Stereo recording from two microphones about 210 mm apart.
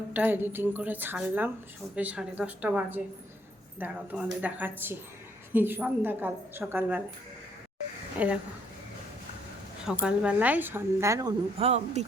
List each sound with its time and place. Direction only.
0.1 s a woman's voice: 10° right (ahead or behind)
8.2 s a woman's voice: 5° right (ahead or behind)
9.8 s a woman's voice: 5° right (ahead or behind)
11.5 s speech: 30° right (ahead or behind)